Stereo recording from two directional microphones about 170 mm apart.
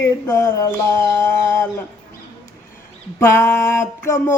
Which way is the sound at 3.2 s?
15° left (ahead or behind).